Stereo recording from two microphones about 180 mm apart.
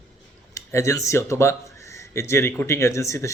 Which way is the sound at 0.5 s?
15° left (ahead or behind).